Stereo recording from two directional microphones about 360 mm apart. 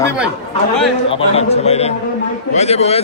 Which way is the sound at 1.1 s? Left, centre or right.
Centre.